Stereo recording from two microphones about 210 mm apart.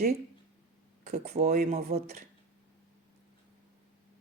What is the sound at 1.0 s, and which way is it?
Speech, 30° right (ahead or behind).